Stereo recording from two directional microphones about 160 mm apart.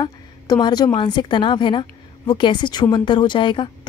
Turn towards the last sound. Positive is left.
turn(degrees=30)  # may be behind; listen again after turning